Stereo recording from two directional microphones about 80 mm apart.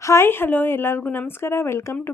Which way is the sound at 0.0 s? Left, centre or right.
Left.